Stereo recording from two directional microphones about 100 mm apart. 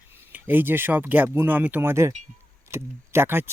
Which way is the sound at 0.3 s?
20° right (ahead or behind).